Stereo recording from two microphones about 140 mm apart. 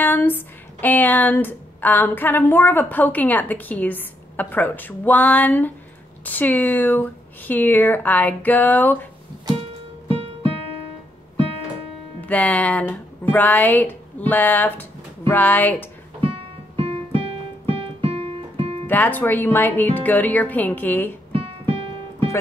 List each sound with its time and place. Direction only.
0.0 s speech: 15° left (ahead or behind)
9.6 s music: 40° right (ahead or behind)
12.2 s speech: 10° left (ahead or behind)
16.2 s keyboard: 40° right (ahead or behind)
18.9 s speech: 15° left (ahead or behind)
21.3 s keyboard: 40° right (ahead or behind)